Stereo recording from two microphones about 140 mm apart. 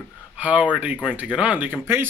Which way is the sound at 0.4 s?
10° right (ahead or behind).